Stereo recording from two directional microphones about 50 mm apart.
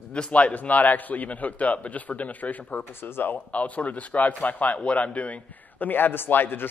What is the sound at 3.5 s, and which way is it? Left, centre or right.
Speech, left.